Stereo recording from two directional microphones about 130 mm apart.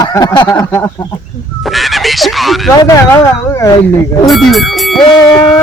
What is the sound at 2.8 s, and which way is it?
Speech, 25° left (ahead or behind).